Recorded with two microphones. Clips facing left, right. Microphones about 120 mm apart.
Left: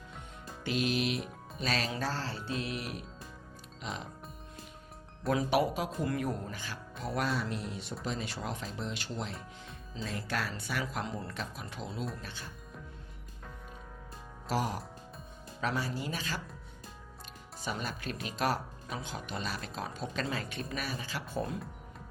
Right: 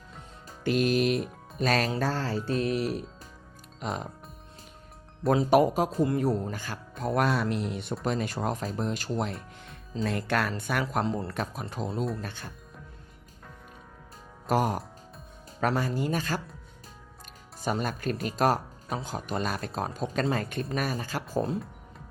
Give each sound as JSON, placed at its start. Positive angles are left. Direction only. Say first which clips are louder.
{"t": 0.6, "sound": "music", "louder": "right 7 dB", "side_deg": -45}
{"t": 2.0, "sound": "speech", "louder": "right 7 dB", "side_deg": -50}
{"t": 5.5, "sound": "speech", "louder": "right 8 dB", "side_deg": -45}
{"t": 6.0, "sound": "speech", "louder": "right 7 dB", "side_deg": -30}
{"t": 6.5, "sound": "speech", "louder": "right 5 dB", "side_deg": -45}
{"t": 10.0, "sound": "speech", "louder": "right 8 dB", "side_deg": -65}
{"t": 11.0, "sound": "speech", "louder": "right 8 dB", "side_deg": -35}
{"t": 14.4, "sound": "speech", "louder": "right 7 dB", "side_deg": -50}
{"t": 17.6, "sound": "speech", "louder": "right 8 dB", "side_deg": -45}
{"t": 21.3, "sound": "speech", "louder": "right 7 dB", "side_deg": -30}